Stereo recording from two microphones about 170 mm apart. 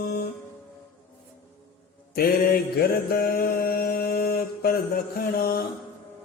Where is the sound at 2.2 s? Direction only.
60° left (ahead or behind).